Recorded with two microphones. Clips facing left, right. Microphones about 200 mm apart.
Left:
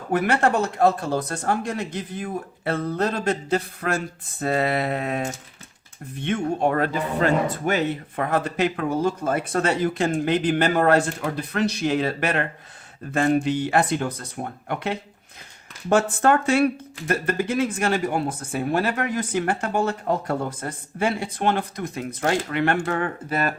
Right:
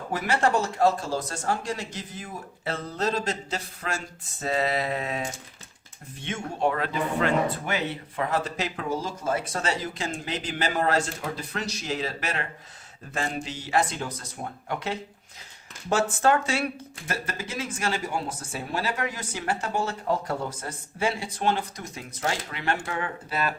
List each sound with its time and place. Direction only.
0.1 s speech: 60° left (ahead or behind)
15.9 s speech: 55° left (ahead or behind)